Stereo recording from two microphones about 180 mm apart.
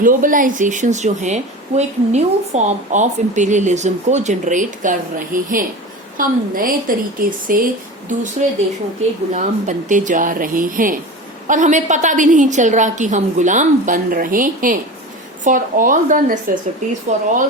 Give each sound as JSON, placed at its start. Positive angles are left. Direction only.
{"t": 0.0, "sound": "speech", "side_deg": -50}